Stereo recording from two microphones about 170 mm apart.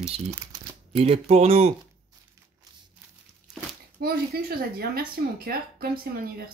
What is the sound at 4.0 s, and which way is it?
Speech, 60° right (ahead or behind).